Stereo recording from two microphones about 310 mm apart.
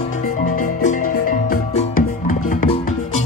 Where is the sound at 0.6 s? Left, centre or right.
Left.